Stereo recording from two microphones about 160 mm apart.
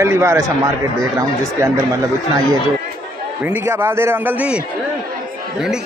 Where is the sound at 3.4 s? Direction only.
15° right (ahead or behind).